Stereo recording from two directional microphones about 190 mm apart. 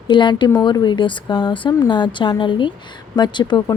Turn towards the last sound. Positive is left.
turn(degrees=25)  # may be behind; listen again after turning